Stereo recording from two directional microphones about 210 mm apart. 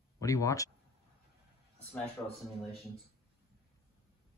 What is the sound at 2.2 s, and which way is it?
Speech, 10° left (ahead or behind).